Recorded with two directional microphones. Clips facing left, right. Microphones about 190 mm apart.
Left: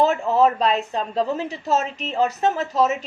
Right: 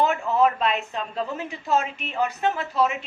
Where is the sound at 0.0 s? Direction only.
35° left (ahead or behind).